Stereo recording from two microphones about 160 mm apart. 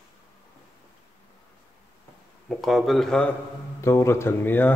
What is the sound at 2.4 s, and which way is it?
Speech, centre (ahead or behind).